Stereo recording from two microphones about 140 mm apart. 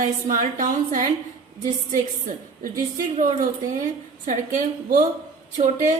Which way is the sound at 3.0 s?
75° right (ahead or behind).